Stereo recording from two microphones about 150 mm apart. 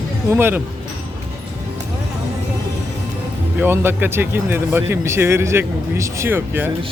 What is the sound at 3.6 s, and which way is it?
Speech, 15° right (ahead or behind).